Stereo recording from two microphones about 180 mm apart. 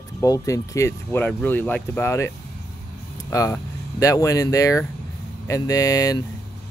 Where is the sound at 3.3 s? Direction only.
20° left (ahead or behind).